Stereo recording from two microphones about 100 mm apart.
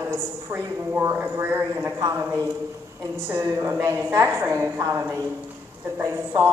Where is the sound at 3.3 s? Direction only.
35° right (ahead or behind).